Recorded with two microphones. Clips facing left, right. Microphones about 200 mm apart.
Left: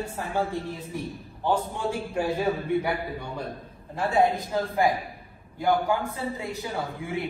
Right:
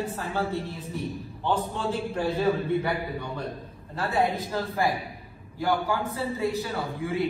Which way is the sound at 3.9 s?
15° left (ahead or behind).